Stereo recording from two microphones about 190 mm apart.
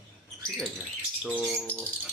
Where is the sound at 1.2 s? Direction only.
Centre (ahead or behind).